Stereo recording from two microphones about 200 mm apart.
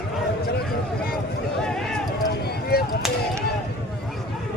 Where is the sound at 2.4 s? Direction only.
50° left (ahead or behind).